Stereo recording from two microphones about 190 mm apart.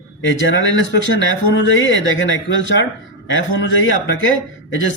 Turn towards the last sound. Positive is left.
turn(degrees=90)